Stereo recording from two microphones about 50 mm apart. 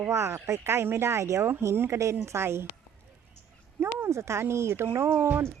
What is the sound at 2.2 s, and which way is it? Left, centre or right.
Speech, right.